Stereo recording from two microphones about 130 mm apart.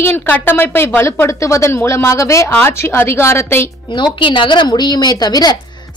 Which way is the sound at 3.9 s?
40° left (ahead or behind).